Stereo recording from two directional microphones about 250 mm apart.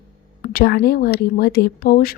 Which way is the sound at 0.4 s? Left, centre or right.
Left.